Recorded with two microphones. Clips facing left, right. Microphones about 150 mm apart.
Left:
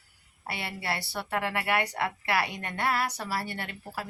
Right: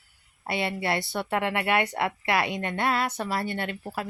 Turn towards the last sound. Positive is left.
turn(degrees=-20)  # may be behind; listen again after turning